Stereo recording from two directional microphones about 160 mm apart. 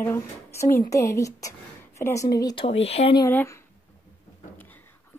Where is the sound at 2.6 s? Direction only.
40° left (ahead or behind).